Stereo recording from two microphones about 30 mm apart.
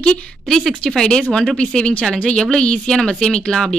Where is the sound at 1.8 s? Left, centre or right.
Left.